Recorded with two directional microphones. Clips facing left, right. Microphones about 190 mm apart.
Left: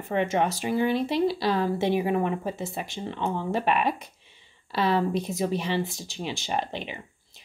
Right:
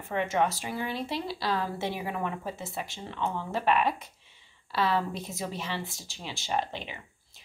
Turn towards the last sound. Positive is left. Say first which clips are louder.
# left 5 dB
turn(degrees=15)  # may be behind; listen again after turning